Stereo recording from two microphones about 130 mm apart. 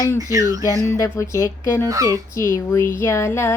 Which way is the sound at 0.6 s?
25° left (ahead or behind).